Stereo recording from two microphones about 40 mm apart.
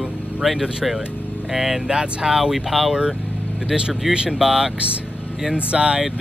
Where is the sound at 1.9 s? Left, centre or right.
Right.